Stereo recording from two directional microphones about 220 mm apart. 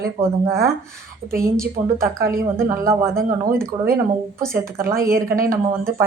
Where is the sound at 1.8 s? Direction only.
25° right (ahead or behind).